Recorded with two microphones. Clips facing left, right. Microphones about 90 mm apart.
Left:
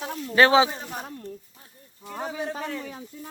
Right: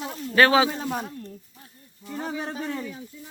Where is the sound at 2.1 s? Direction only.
60° left (ahead or behind).